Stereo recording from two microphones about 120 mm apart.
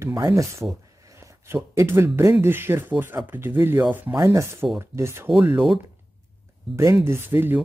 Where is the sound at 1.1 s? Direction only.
25° right (ahead or behind).